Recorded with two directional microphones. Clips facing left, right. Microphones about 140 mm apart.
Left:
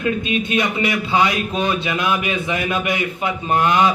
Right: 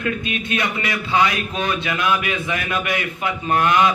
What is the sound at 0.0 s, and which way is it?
A man's voice, 20° left (ahead or behind).